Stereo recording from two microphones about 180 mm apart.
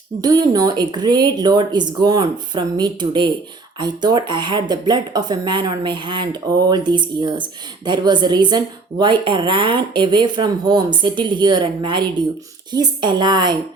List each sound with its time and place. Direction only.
0.2 s a woman's voice: 20° right (ahead or behind)